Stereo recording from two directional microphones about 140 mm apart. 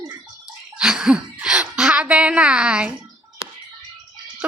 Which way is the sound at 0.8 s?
5° right (ahead or behind).